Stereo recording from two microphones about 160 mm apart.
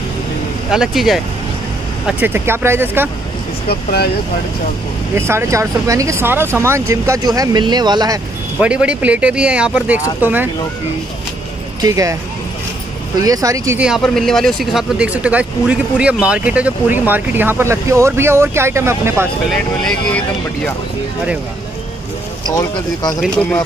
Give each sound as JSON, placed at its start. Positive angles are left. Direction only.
{"t": 0.7, "sound": "speech", "side_deg": 0}
{"t": 3.6, "sound": "speech", "side_deg": 80}
{"t": 5.1, "sound": "speech", "side_deg": -15}
{"t": 8.5, "sound": "speech", "side_deg": -5}
{"t": 11.8, "sound": "speech", "side_deg": -20}
{"t": 13.2, "sound": "speech", "side_deg": -20}
{"t": 13.7, "sound": "speech", "side_deg": -5}
{"t": 19.8, "sound": "speech", "side_deg": 5}
{"t": 22.5, "sound": "speech", "side_deg": 20}